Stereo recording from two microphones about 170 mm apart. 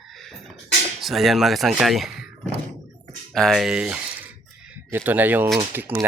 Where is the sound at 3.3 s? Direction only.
Centre (ahead or behind).